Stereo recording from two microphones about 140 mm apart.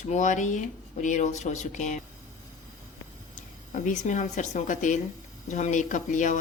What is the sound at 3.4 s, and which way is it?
Speech, 65° left (ahead or behind).